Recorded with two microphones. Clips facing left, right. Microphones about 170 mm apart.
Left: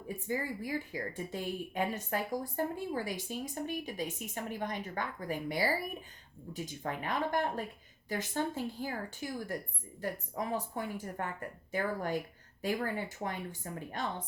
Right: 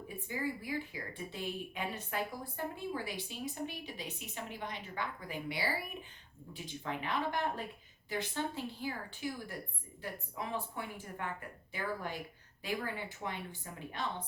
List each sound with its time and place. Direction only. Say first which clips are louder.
0.3 s a woman's voice: left 2 dB; 45° left (ahead or behind)